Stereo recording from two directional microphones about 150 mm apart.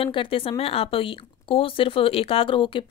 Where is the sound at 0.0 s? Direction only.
35° left (ahead or behind).